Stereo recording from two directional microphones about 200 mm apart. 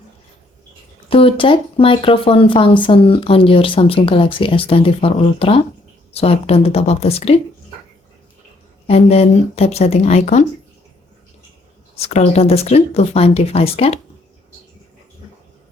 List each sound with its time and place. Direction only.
1.0 s speech: 25° left (ahead or behind)
8.9 s speech: 30° left (ahead or behind)
11.9 s speech: 30° left (ahead or behind)